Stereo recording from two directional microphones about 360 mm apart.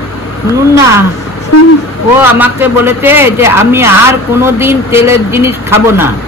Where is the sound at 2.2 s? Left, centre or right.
Centre.